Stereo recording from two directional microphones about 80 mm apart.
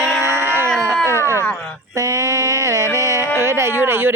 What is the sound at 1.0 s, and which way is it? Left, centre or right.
Speech, right.